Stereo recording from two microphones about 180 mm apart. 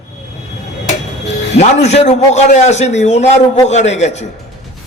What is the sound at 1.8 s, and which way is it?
A man's voice, 40° left (ahead or behind).